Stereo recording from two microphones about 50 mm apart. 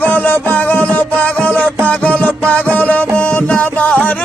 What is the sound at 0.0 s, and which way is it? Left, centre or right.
Music, left.